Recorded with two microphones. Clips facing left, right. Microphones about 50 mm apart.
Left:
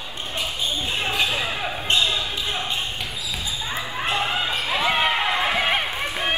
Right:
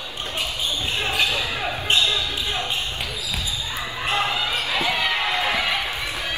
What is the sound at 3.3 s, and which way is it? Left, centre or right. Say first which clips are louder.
Basketball bounce: left 3 dB; left.